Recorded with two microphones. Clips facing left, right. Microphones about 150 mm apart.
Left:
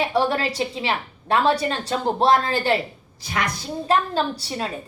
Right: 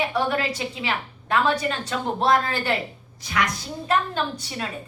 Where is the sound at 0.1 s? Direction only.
35° left (ahead or behind).